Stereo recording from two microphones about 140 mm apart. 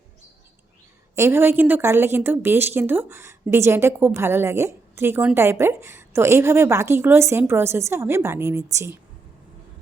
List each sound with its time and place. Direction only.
1.1 s a woman's voice: 20° right (ahead or behind)